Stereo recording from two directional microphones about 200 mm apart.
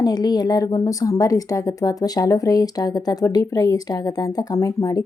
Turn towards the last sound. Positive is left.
turn(degrees=15)  # may be behind; listen again after turning